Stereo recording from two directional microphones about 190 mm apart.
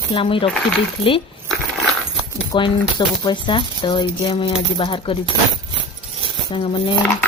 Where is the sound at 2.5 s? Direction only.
25° left (ahead or behind).